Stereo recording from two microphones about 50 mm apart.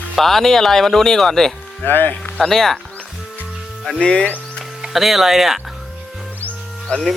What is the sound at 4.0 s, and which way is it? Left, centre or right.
Speech, left.